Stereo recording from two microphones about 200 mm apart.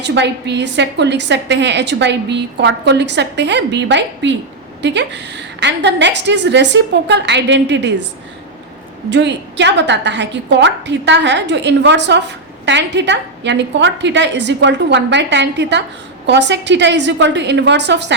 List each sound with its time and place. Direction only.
0.0 s a woman's voice: 60° right (ahead or behind)
9.0 s a woman's voice: 60° right (ahead or behind)